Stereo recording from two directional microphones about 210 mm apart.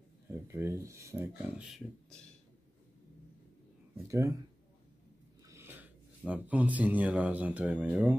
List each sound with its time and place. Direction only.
0.3 s speech: 10° right (ahead or behind)
1.7 s speech: 5° left (ahead or behind)
4.1 s speech: 15° right (ahead or behind)
5.5 s speech: 10° right (ahead or behind)